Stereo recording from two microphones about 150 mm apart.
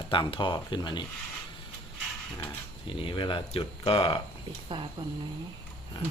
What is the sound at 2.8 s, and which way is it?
Speech, 35° left (ahead or behind).